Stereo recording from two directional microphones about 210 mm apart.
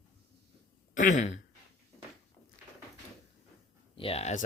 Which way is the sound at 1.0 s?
35° left (ahead or behind).